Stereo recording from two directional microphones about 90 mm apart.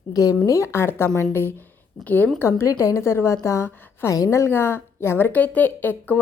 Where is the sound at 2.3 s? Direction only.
30° left (ahead or behind).